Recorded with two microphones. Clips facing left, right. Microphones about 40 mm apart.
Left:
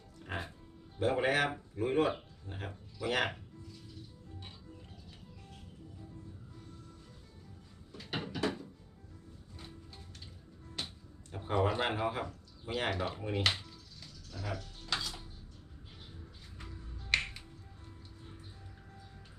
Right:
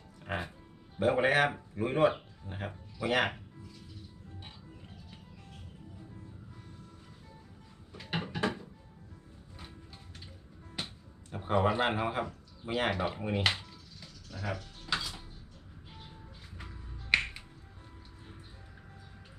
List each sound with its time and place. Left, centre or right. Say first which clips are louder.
0.2 s music: right 4 dB; centre
1.0 s speech: right 4 dB; centre
2.6 s music: right 4 dB; centre
7.9 s a sound: right 3 dB; centre
9.6 s music: right 1 dB; centre
16.6 s music: right 1 dB; centre